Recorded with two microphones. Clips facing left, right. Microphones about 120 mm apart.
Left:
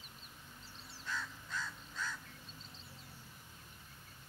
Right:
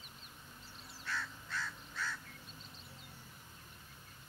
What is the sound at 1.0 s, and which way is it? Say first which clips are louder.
Crow: right 1 dB; 15° left (ahead or behind).